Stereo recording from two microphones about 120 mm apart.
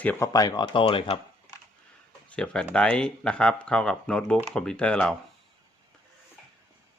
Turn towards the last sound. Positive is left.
turn(degrees=10)  # may be behind; listen again after turning